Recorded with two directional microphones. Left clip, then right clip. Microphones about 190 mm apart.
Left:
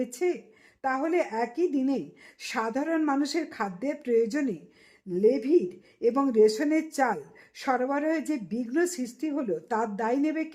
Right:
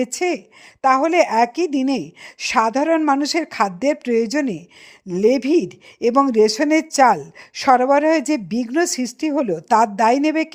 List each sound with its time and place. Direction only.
0.0 s speech: 35° right (ahead or behind)